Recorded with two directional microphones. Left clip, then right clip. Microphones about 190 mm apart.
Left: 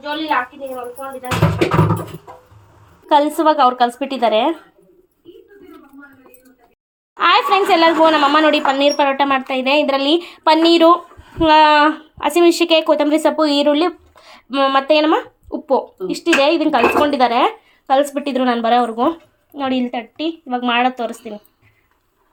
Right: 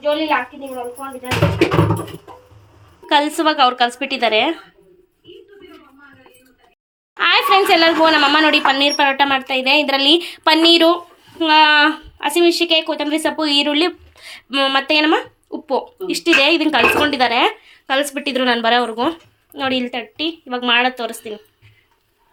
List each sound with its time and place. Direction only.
3.1 s a woman's voice: 15° left (ahead or behind)
7.2 s a woman's voice: 10° left (ahead or behind)
11.3 s speech: 25° left (ahead or behind)
12.2 s a woman's voice: 30° left (ahead or behind); by 21.3 s 15° left (ahead or behind)